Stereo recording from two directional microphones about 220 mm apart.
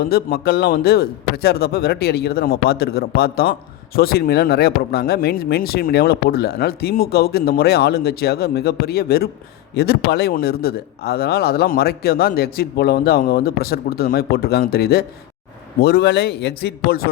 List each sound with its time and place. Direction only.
0.0 s speech: 45° left (ahead or behind)